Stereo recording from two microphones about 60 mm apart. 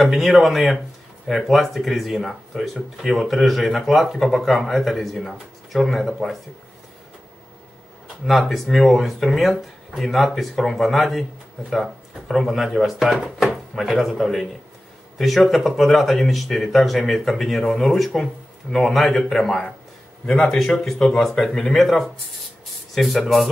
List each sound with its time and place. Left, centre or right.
0.0 s speech: centre
8.3 s speech: centre